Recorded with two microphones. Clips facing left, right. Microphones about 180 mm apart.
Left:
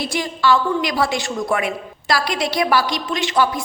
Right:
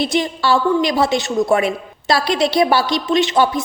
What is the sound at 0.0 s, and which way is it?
A woman's voice, 25° right (ahead or behind).